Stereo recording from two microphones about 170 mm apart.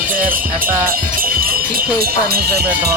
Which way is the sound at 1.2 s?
60° right (ahead or behind).